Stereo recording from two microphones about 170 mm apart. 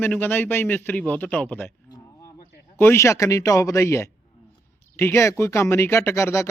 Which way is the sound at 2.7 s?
15° left (ahead or behind).